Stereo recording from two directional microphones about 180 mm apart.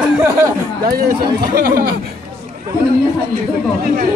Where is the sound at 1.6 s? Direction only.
55° right (ahead or behind).